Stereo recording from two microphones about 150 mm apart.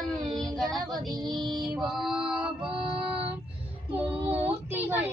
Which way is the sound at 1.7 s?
Centre (ahead or behind).